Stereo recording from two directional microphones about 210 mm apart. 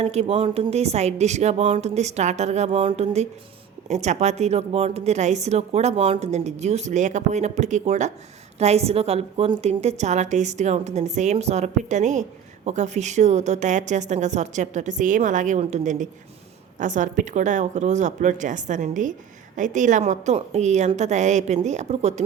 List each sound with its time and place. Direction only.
0.0 s a woman's voice: 30° right (ahead or behind)